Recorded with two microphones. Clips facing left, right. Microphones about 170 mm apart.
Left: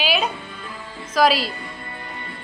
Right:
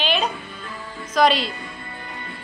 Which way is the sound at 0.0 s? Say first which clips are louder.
Left 1 dB; 5° left (ahead or behind).